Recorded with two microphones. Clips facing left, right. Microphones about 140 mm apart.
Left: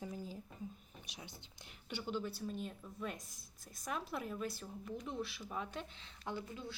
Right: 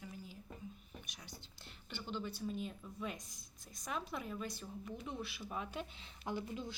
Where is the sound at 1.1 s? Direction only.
25° left (ahead or behind).